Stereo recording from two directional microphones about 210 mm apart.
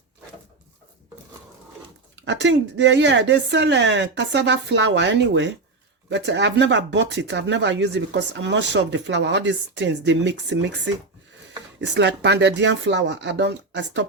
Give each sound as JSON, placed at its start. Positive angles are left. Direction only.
{"t": 2.1, "sound": "speech", "side_deg": -55}